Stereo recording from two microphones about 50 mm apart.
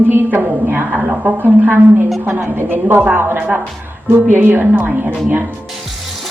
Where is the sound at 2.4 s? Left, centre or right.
Right.